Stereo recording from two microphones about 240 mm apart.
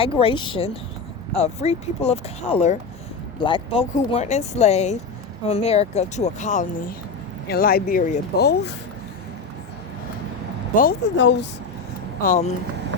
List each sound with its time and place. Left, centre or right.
0.0 s speech: left
11.2 s speech: left
12.2 s speech: left